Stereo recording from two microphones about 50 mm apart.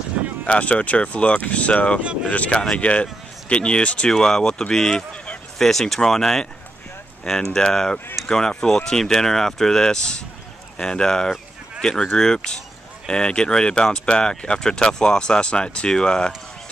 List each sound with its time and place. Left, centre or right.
0.5 s speech: left; by 6.4 s centre
7.5 s speech: centre